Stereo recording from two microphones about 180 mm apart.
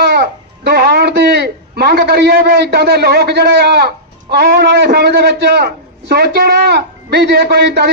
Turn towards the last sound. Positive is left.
turn(degrees=-70)  # may be behind; listen again after turning